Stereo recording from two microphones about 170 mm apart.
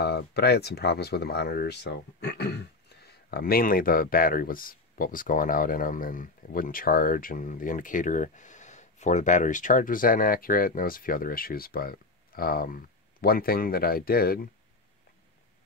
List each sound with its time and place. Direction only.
0.0 s speech: 70° left (ahead or behind)